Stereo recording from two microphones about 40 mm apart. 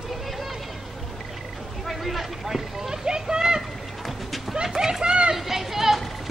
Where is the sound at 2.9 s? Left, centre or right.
Centre.